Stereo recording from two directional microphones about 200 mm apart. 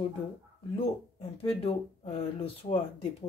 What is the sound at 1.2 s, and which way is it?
A woman's voice, 30° left (ahead or behind).